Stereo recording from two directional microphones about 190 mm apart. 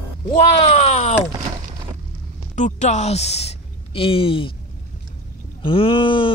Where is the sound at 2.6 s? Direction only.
40° left (ahead or behind).